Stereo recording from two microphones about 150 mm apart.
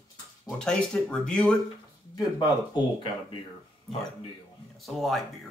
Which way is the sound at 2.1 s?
30° left (ahead or behind).